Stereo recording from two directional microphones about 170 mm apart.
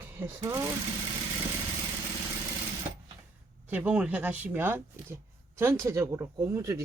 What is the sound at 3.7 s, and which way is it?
Speech, 10° right (ahead or behind).